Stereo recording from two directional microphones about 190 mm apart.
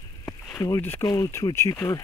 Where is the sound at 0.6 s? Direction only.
15° left (ahead or behind).